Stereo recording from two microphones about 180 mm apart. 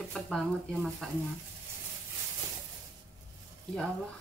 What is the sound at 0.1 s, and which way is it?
A woman's voice, centre (ahead or behind).